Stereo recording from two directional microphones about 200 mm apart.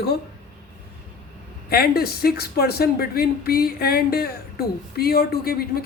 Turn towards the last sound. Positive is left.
turn(degrees=50)  # may be behind; listen again after turning